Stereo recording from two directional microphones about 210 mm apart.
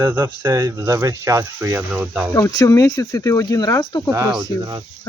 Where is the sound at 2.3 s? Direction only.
15° left (ahead or behind).